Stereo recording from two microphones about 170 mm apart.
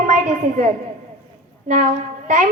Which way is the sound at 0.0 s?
50° right (ahead or behind).